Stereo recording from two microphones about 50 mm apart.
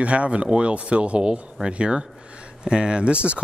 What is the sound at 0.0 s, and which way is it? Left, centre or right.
Speech, right.